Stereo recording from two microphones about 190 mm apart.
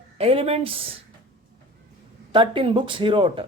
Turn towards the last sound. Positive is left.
turn(degrees=-30)  # may be behind; listen again after turning